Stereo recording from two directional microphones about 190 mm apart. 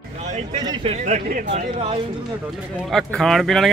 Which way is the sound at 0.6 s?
25° right (ahead or behind).